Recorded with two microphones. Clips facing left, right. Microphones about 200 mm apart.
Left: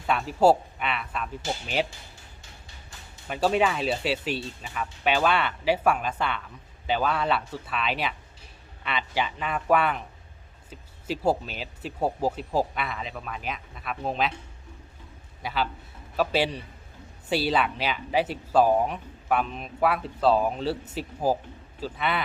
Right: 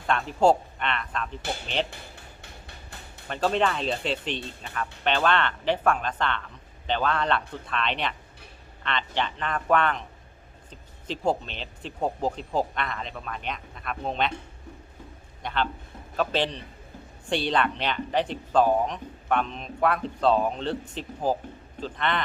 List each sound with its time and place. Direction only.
0.1 s speech: 5° left (ahead or behind)
1.9 s a sound: 60° right (ahead or behind)
3.2 s speech: 10° left (ahead or behind)
15.4 s a man's voice: 5° left (ahead or behind)